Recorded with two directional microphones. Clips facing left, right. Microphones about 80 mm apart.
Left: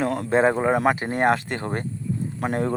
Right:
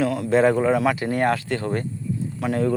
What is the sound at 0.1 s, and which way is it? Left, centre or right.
Speech, left.